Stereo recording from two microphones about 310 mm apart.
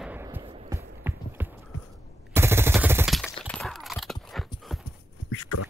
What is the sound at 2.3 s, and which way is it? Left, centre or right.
Machine gun, centre.